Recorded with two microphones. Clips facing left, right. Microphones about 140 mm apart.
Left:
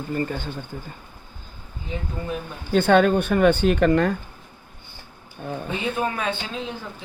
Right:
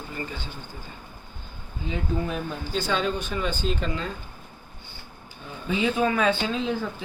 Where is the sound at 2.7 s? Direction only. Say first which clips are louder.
Left 10 dB; 60° left (ahead or behind).